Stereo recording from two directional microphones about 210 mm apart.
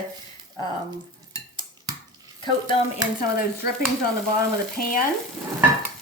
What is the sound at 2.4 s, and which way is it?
Speech, 25° left (ahead or behind).